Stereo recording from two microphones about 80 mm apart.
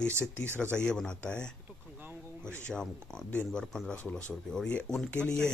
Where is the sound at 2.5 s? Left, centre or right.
Centre.